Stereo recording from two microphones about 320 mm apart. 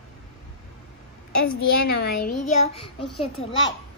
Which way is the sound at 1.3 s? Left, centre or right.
Left.